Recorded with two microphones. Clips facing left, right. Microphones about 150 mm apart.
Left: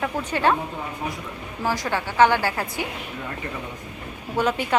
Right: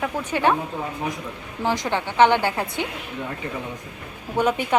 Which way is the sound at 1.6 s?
20° right (ahead or behind).